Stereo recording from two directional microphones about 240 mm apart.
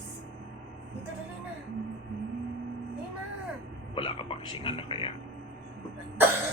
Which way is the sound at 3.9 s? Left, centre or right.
Left.